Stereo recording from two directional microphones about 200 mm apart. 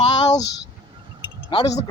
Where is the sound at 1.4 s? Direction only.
25° left (ahead or behind).